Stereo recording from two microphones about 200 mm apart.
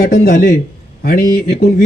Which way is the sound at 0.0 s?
50° left (ahead or behind).